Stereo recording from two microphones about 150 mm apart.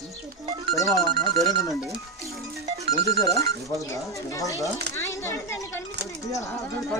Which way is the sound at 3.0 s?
20° left (ahead or behind).